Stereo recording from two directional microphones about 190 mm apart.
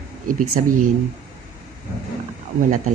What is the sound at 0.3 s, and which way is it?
Speech, 45° right (ahead or behind).